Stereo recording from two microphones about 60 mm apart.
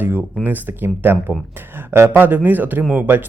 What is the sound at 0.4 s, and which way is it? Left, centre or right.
Speech, right.